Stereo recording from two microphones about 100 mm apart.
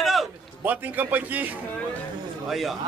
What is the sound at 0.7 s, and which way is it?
Speech, 15° right (ahead or behind).